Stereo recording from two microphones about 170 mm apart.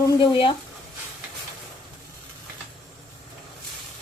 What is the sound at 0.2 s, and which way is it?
Speech, 30° left (ahead or behind).